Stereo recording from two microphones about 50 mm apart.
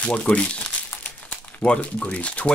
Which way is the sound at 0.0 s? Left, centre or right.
Left.